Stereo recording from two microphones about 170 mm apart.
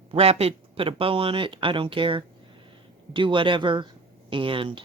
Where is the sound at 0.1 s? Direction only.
35° right (ahead or behind).